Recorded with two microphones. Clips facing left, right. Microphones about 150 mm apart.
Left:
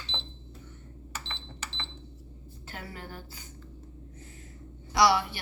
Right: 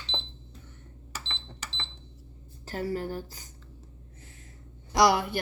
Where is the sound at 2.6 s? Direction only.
40° right (ahead or behind).